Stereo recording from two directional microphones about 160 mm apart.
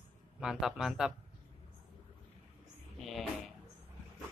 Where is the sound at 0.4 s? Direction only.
5° right (ahead or behind).